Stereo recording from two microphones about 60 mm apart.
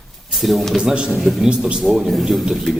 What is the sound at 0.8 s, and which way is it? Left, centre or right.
Speech, centre.